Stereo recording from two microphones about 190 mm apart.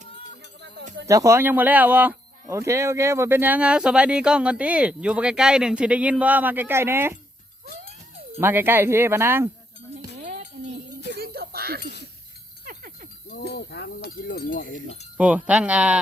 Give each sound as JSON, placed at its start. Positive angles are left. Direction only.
{"t": 1.0, "sound": "speech", "side_deg": -15}
{"t": 8.4, "sound": "speech", "side_deg": -10}
{"t": 11.1, "sound": "a sound", "side_deg": -55}
{"t": 13.2, "sound": "cowbell", "side_deg": 55}
{"t": 15.2, "sound": "speech", "side_deg": -5}